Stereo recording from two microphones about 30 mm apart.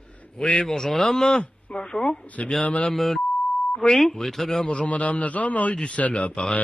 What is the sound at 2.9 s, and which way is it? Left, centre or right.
Speech, centre.